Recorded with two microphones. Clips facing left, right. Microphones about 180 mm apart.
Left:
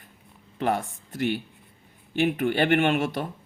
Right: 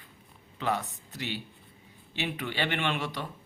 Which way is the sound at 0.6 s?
50° left (ahead or behind).